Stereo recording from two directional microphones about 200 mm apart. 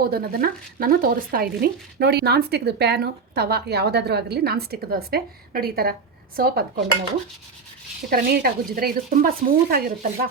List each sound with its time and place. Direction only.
0.0 s speech: 50° right (ahead or behind)
8.1 s speech: 50° right (ahead or behind)